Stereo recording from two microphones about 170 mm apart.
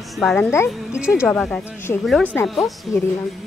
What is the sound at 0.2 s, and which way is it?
Speech, 5° left (ahead or behind).